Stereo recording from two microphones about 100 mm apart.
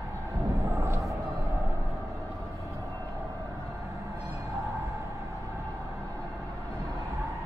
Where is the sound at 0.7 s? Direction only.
30° right (ahead or behind).